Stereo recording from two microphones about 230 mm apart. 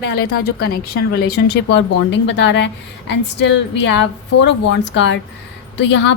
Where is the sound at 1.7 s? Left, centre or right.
Left.